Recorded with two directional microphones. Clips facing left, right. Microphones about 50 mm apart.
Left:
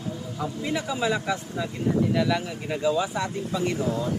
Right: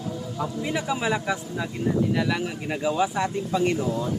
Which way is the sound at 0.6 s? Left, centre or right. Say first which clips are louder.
Even; centre.